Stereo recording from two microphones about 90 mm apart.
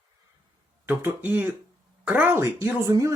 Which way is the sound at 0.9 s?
20° right (ahead or behind).